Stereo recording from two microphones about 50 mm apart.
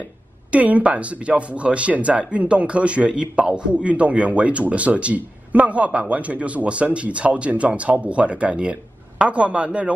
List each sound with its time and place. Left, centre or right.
0.5 s speech: right